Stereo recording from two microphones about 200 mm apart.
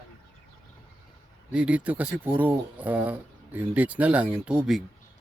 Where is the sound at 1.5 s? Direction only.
5° right (ahead or behind).